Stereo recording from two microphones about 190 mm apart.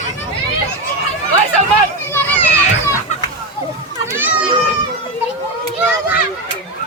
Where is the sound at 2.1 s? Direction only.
10° left (ahead or behind).